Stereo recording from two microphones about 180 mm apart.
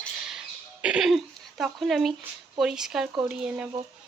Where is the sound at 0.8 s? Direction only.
5° right (ahead or behind).